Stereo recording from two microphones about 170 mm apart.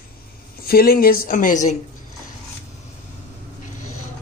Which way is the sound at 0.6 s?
60° left (ahead or behind).